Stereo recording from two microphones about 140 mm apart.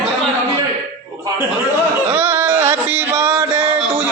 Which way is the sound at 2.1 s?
15° right (ahead or behind).